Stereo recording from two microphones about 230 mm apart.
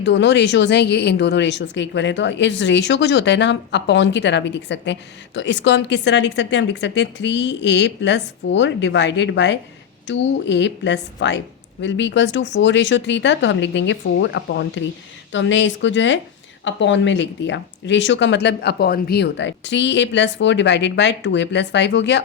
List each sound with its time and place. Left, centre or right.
0.0 s a woman's voice: left